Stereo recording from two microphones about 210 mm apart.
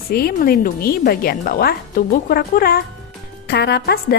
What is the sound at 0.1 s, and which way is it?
A woman's voice, 45° left (ahead or behind).